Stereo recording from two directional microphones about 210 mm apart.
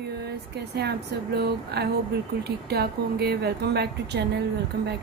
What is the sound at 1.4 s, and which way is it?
Speech, 50° right (ahead or behind).